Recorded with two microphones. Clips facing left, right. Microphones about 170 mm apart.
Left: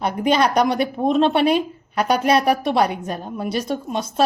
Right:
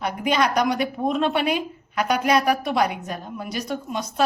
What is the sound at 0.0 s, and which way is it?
A woman's voice, 30° left (ahead or behind).